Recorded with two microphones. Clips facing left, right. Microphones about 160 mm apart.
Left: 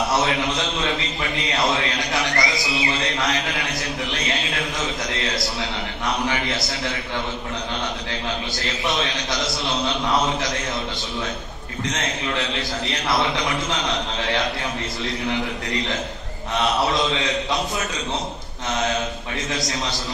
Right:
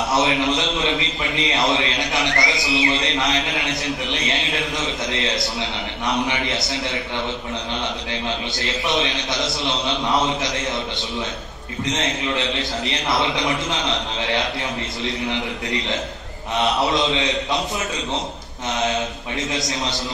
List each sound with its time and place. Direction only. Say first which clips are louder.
0.2 s a man's voice: right 3 dB; 20° right (ahead or behind)
1.7 s a sound: right 2 dB; 20° right (ahead or behind)
2.5 s a man's voice: right 3 dB; 20° right (ahead or behind)
8.6 s a man's voice: right 2 dB; 20° right (ahead or behind)
11.8 s a man's voice: right 3 dB; 20° right (ahead or behind)
16.8 s a man's voice: right 2 dB; 20° right (ahead or behind)
18.7 s a man's voice: right 1 dB; 20° right (ahead or behind)